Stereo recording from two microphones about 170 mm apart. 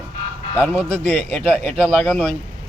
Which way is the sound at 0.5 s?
10° left (ahead or behind).